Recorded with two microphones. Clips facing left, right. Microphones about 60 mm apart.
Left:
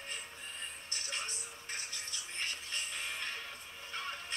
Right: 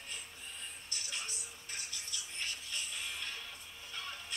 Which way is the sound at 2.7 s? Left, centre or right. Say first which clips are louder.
Left 2 dB; left.